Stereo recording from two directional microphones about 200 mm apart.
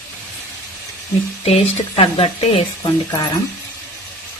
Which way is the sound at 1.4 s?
30° left (ahead or behind).